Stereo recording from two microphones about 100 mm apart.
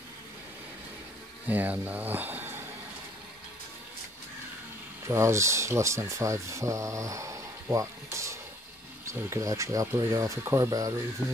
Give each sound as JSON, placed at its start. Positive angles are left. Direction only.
{"t": 1.5, "sound": "speech", "side_deg": -15}
{"t": 5.0, "sound": "speech", "side_deg": -30}